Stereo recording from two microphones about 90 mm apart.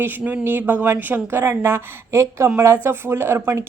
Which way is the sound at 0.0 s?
20° right (ahead or behind).